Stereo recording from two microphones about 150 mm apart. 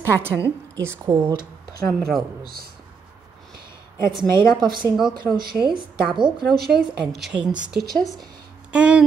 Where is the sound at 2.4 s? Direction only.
90° right.